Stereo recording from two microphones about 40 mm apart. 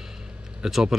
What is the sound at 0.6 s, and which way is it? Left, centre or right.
Speech, centre.